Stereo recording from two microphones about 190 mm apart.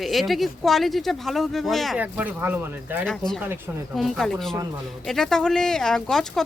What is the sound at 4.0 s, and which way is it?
Speech, centre (ahead or behind).